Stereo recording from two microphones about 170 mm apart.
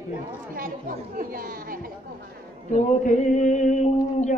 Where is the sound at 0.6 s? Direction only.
55° right (ahead or behind).